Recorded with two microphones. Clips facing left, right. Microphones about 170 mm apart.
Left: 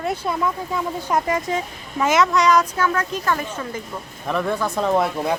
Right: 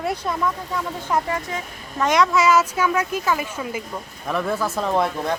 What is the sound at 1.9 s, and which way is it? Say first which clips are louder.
Speech: left 1 dB; 5° left (ahead or behind).